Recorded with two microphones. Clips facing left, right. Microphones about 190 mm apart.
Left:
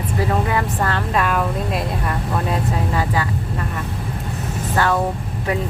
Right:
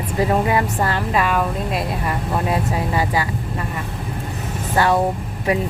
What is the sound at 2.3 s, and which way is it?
Speech, 10° right (ahead or behind).